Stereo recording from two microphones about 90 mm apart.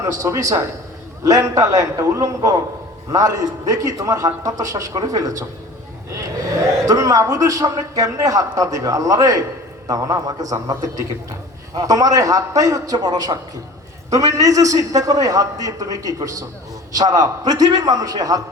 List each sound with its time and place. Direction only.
0.0 s a man's voice: 40° right (ahead or behind)